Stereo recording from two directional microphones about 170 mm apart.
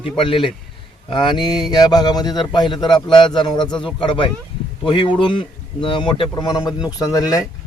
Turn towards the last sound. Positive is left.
turn(degrees=20)  # may be behind; listen again after turning